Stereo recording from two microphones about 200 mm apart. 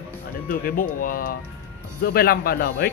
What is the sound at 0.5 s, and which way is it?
Speech, 45° left (ahead or behind).